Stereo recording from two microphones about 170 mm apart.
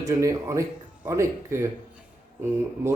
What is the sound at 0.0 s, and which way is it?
A man's voice, 20° right (ahead or behind).